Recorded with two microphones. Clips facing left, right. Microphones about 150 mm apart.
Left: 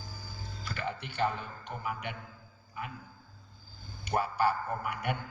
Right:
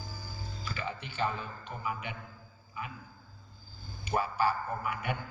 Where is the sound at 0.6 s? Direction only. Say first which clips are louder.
Left 2 dB; 60° left (ahead or behind).